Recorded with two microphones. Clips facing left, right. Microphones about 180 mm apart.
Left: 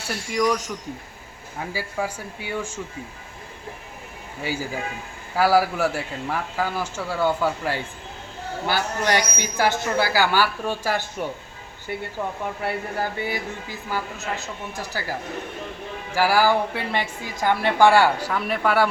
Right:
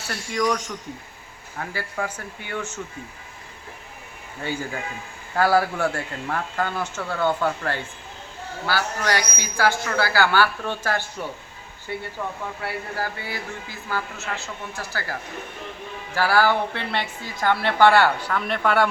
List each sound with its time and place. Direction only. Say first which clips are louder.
0.1 s speech: left 1 dB; 5° left (ahead or behind)
4.4 s a man's voice: left 1 dB; 5° left (ahead or behind)
8.6 s speech: left 1 dB; 20° left (ahead or behind)
16.1 s speech: left 1 dB; 10° left (ahead or behind)